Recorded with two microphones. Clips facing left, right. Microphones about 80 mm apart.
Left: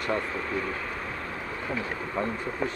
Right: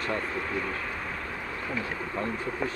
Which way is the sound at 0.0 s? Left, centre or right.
Centre.